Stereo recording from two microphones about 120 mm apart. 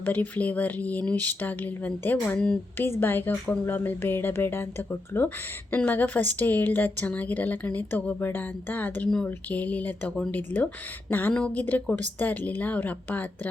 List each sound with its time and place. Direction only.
0.0 s a woman's voice: 15° left (ahead or behind)